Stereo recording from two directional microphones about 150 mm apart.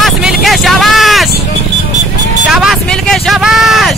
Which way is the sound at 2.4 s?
5° right (ahead or behind).